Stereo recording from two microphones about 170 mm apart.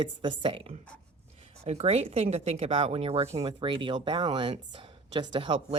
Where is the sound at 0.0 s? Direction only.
30° right (ahead or behind).